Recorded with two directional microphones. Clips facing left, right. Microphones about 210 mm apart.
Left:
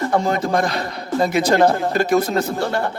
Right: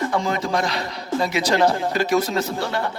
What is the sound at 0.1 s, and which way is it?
Music, 50° left (ahead or behind).